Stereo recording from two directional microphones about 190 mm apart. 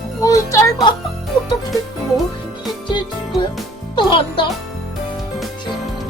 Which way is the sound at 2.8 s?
25° left (ahead or behind).